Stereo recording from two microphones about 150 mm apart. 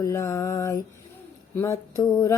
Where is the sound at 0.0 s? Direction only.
20° left (ahead or behind).